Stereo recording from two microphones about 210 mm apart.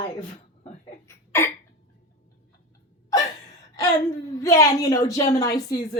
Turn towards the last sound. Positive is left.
turn(degrees=15)  # may be behind; listen again after turning